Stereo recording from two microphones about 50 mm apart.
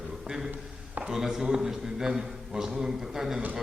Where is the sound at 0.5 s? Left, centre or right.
Right.